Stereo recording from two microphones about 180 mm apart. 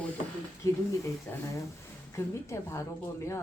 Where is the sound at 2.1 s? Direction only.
15° left (ahead or behind).